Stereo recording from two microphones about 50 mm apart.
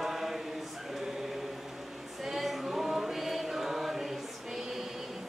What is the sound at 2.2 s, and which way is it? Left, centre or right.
Choir, centre.